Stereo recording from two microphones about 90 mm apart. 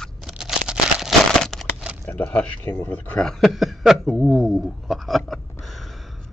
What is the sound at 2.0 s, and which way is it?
Speech, 15° left (ahead or behind).